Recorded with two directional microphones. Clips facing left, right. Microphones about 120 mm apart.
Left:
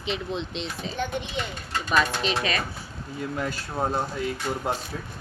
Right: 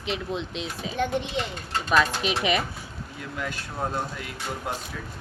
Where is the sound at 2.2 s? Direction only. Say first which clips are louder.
Right 2 dB; 15° right (ahead or behind).